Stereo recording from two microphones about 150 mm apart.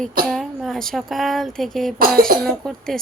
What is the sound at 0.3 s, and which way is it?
Speech, centre (ahead or behind).